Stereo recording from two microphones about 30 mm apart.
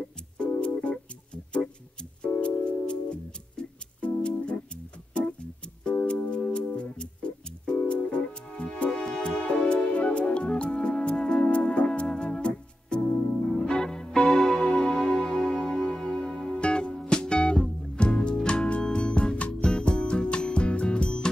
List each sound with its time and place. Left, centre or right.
0.4 s music: left
2.3 s music: left
9.9 s music: left
11.3 s music: left
13.7 s music: left
14.6 s music: left
14.9 s music: left
16.4 s music: left